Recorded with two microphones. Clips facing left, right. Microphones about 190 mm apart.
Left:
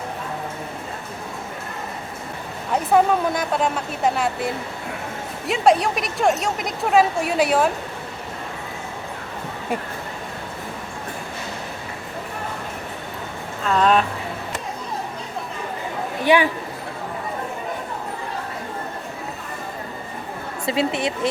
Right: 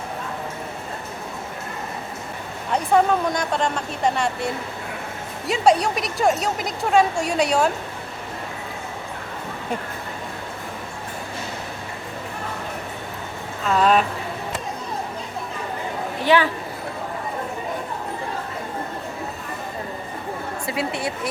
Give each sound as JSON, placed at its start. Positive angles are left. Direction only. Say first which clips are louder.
{"t": 2.7, "sound": "a woman's voice", "louder": "left 1 dB", "side_deg": 5}
{"t": 5.5, "sound": "a woman's voice", "louder": "left 1 dB", "side_deg": 0}
{"t": 13.7, "sound": "a woman's voice", "louder": "even", "side_deg": 0}
{"t": 16.2, "sound": "speech", "louder": "left 1 dB", "side_deg": 15}
{"t": 20.7, "sound": "speech", "louder": "left 5 dB", "side_deg": 25}